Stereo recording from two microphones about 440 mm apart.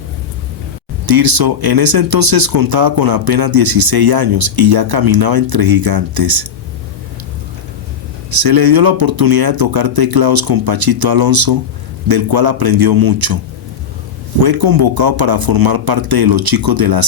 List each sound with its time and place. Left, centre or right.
1.0 s speech: right
8.4 s speech: right
14.4 s speech: right